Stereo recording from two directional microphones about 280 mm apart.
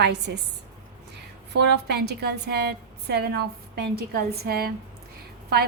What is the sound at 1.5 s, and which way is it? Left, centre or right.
A woman's voice, right.